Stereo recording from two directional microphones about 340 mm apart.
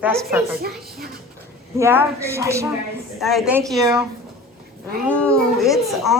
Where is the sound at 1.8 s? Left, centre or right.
Centre.